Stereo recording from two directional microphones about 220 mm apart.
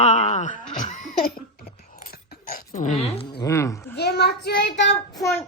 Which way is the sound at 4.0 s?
50° left (ahead or behind).